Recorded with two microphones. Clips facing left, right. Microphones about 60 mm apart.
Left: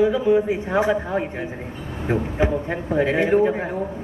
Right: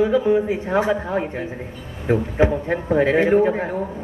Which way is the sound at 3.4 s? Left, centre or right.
Right.